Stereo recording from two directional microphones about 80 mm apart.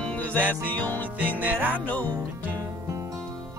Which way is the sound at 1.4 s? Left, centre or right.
Right.